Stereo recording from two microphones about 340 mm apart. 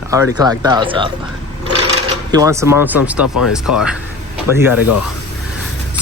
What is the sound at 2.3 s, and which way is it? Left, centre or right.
Speech, centre.